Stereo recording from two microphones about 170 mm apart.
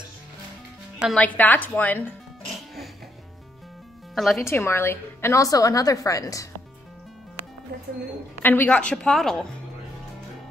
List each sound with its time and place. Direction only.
1.1 s a woman's voice: 10° left (ahead or behind)
4.1 s speech: centre (ahead or behind)
4.5 s a woman's voice: 15° left (ahead or behind)
8.4 s a woman's voice: 10° left (ahead or behind)